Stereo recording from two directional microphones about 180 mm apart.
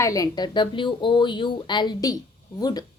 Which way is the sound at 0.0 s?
20° left (ahead or behind).